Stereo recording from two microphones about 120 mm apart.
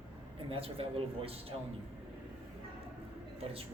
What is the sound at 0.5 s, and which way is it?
A man's voice, 55° right (ahead or behind).